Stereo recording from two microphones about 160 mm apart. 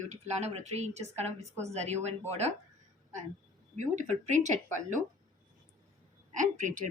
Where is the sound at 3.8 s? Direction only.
50° right (ahead or behind).